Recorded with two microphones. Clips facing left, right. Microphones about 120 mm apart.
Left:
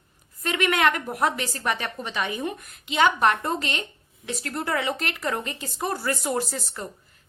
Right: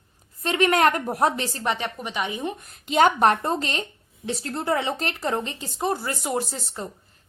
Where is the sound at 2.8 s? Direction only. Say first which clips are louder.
Right 3 dB; 40° right (ahead or behind); by 6.9 s 25° right (ahead or behind).